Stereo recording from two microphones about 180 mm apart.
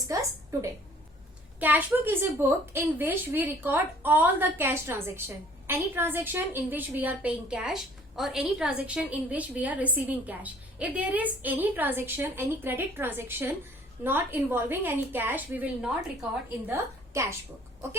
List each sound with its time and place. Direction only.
1.5 s a woman's voice: 10° right (ahead or behind)